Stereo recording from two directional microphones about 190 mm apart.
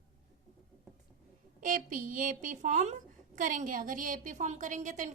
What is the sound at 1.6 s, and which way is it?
A woman's voice, 45° right (ahead or behind).